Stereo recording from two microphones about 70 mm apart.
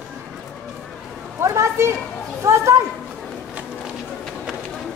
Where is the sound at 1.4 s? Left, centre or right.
Right.